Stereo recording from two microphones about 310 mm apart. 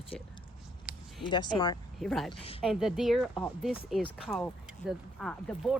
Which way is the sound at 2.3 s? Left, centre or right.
Centre.